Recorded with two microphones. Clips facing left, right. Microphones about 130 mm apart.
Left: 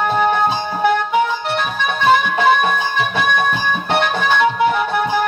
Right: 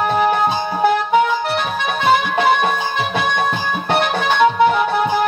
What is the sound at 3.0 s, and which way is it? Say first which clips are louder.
Music: left 1 dB; 25° right (ahead or behind).